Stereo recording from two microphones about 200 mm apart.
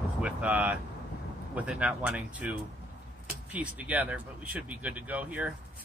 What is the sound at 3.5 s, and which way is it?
Speech, 5° right (ahead or behind).